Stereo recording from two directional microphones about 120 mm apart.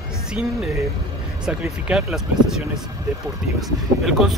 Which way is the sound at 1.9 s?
5° right (ahead or behind).